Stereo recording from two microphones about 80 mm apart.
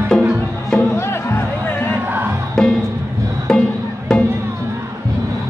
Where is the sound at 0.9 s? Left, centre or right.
Left.